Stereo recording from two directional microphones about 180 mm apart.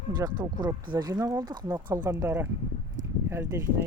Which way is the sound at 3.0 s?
45° right (ahead or behind).